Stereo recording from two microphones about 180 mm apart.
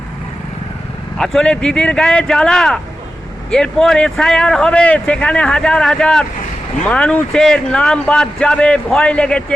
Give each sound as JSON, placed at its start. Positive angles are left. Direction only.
{"t": 1.2, "sound": "speech", "side_deg": 5}